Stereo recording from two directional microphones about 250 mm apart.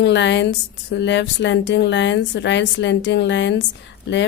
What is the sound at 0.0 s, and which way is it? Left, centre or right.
A woman's voice, left.